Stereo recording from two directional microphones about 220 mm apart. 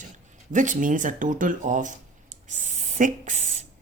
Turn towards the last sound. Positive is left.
turn(degrees=-35)  # may be behind; listen again after turning